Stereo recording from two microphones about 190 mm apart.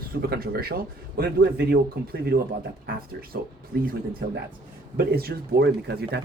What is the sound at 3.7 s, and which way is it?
A man's voice, 50° right (ahead or behind).